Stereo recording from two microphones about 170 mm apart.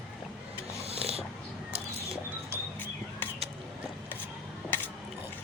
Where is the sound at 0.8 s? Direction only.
35° right (ahead or behind).